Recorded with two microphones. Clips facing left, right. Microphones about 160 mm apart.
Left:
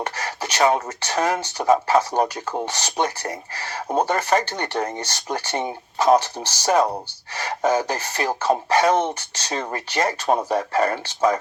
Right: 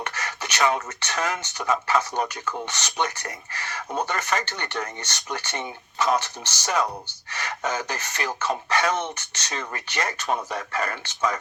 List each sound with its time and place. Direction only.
0.0 s speech: 35° left (ahead or behind)